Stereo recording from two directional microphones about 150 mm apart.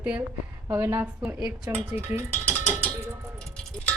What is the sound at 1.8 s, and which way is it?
Speech, 15° right (ahead or behind).